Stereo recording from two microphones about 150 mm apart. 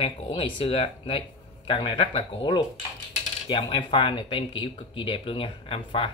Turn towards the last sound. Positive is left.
turn(degrees=35)  # may be behind; listen again after turning